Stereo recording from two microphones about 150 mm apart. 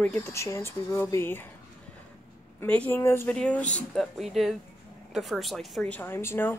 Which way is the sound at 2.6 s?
10° left (ahead or behind).